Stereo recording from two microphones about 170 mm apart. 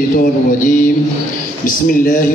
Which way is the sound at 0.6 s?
50° left (ahead or behind).